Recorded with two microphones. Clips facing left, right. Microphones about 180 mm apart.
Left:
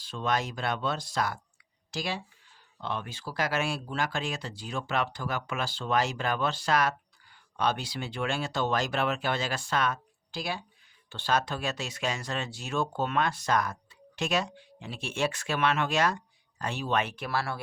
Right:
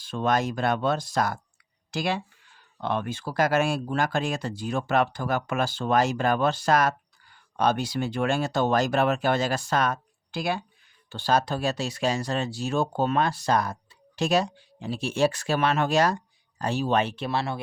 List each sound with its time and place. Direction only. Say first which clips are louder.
0.0 s speech: right 5 dB; 50° right (ahead or behind)
1.9 s speech: right 6 dB; 55° right (ahead or behind)
11.1 s speech: right 5 dB; 35° right (ahead or behind); by 17.6 s 20° right (ahead or behind)